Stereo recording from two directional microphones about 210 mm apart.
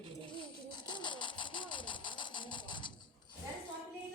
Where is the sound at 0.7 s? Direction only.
20° left (ahead or behind).